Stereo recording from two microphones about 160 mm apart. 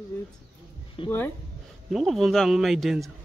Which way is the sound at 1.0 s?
30° left (ahead or behind).